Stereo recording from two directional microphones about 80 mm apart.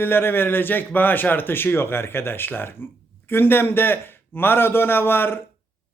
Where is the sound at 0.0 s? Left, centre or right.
Left.